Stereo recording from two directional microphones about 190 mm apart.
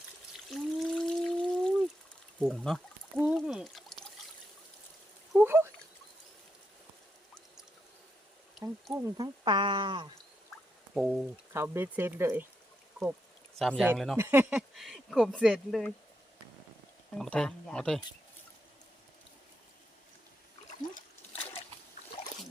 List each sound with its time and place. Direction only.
0.5 s trickle: centre (ahead or behind)
2.4 s speech: centre (ahead or behind)
3.2 s a sound: 5° right (ahead or behind)
5.3 s a sound: 10° right (ahead or behind)
8.6 s speech: 15° right (ahead or behind)
10.9 s speech: centre (ahead or behind)
11.5 s speech: 15° right (ahead or behind)
13.6 s speech: centre (ahead or behind)
14.8 s speech: centre (ahead or behind)
17.2 s speech: 5° left (ahead or behind)
20.7 s splash: 40° left (ahead or behind)